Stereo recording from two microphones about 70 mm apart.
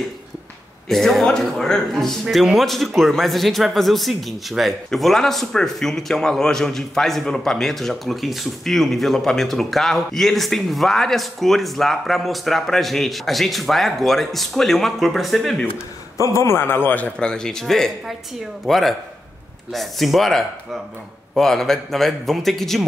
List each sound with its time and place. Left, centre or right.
0.8 s speech: centre
16.2 s a man's voice: left
17.2 s speech: centre